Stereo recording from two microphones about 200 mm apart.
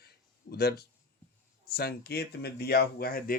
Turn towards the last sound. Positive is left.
turn(degrees=50)  # may be behind; listen again after turning